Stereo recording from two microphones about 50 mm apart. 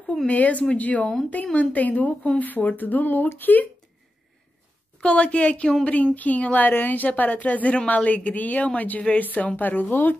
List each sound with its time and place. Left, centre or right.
0.0 s speech: centre
0.3 s a woman's voice: left
5.0 s a woman's voice: left